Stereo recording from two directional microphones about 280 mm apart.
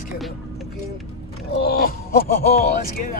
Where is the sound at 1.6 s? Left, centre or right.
Left.